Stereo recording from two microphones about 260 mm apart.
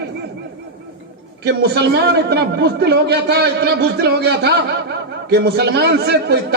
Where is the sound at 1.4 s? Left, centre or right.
Right.